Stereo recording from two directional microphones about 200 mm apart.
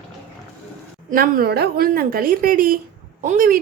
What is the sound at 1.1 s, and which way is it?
Speech, 50° right (ahead or behind).